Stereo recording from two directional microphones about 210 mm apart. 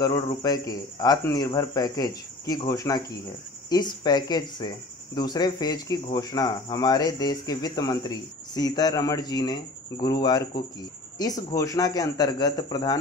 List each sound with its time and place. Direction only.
0.0 s speech: 15° left (ahead or behind)